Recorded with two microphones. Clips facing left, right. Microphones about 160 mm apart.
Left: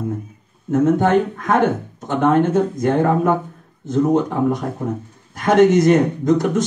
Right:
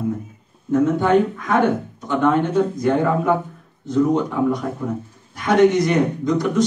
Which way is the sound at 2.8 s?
50° left (ahead or behind).